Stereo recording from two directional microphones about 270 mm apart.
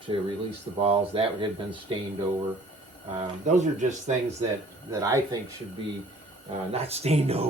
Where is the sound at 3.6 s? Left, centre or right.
Right.